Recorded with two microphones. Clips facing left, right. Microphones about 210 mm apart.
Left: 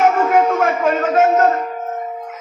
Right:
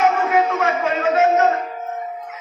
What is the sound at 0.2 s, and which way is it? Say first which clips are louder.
Music: left 4 dB; 45° left (ahead or behind).